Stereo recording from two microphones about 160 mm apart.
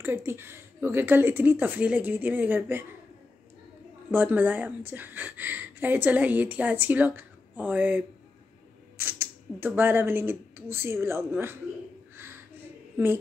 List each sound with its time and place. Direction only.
0.0 s speech: 15° right (ahead or behind)
4.1 s speech: 10° right (ahead or behind)
12.9 s speech: 15° right (ahead or behind)